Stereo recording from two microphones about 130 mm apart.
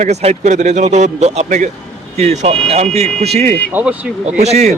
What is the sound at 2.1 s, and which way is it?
A man's voice, 60° right (ahead or behind).